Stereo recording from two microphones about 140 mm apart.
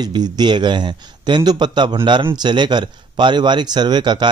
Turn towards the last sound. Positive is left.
turn(degrees=-30)  # may be behind; listen again after turning